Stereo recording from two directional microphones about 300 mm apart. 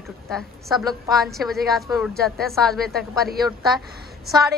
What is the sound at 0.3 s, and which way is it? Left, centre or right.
A woman's voice, centre.